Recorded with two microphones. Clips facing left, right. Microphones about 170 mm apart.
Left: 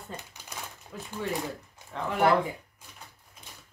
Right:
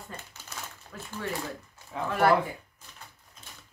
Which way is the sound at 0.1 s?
15° left (ahead or behind).